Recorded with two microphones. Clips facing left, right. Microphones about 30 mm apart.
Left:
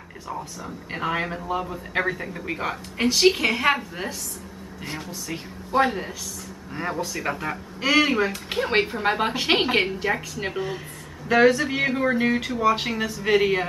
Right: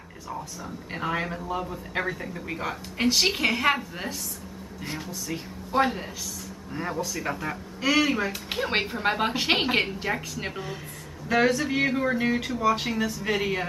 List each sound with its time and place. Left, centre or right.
0.3 s speech: centre
3.1 s speech: centre
6.7 s speech: centre
8.3 s speech: centre